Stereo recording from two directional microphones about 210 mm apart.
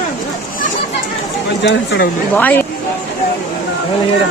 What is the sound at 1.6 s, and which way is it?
Speech, 55° left (ahead or behind).